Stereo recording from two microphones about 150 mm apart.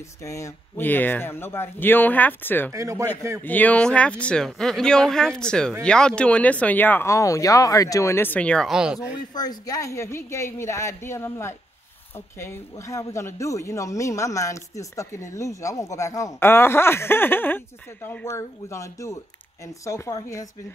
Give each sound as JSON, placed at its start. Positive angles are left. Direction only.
{"t": 0.2, "sound": "speech", "side_deg": 20}
{"t": 2.7, "sound": "speech", "side_deg": -20}
{"t": 3.4, "sound": "speech", "side_deg": 10}
{"t": 9.3, "sound": "speech", "side_deg": 25}